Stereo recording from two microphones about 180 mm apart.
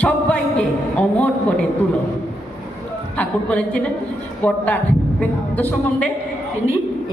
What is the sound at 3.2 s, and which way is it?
Speech, 5° left (ahead or behind).